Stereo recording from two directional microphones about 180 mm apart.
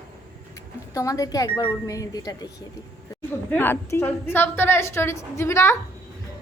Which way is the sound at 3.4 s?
10° left (ahead or behind).